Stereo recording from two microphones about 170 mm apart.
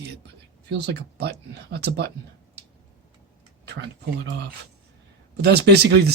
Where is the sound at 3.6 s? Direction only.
85° right.